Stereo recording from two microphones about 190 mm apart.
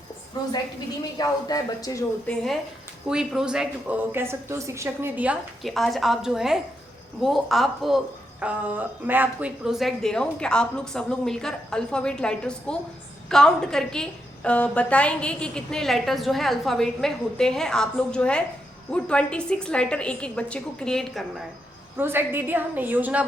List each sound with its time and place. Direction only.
0.4 s speech: 20° left (ahead or behind)
2.3 s a woman's voice: centre (ahead or behind)
21.9 s a woman's voice: 10° right (ahead or behind)